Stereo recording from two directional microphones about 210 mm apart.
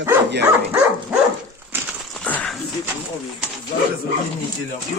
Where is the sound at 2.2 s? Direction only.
5° left (ahead or behind).